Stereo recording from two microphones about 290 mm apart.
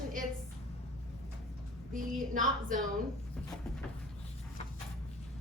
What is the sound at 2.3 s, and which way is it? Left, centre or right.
Speech, right.